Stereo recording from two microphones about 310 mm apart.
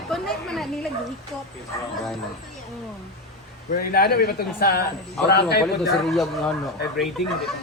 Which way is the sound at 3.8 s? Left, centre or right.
Left.